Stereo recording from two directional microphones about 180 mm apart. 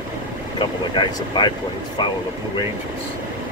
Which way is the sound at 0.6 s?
25° left (ahead or behind).